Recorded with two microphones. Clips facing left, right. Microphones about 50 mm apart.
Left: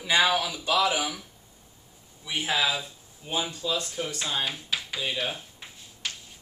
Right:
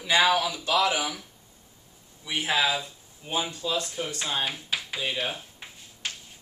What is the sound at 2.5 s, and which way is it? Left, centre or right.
Speech, centre.